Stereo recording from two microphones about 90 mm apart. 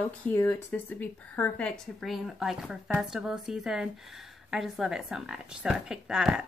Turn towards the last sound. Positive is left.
turn(degrees=-10)  # may be behind; listen again after turning